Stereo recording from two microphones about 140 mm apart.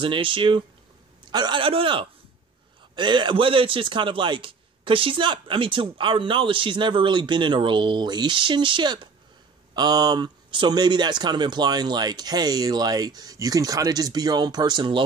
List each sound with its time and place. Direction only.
0.0 s a man's voice: 40° right (ahead or behind)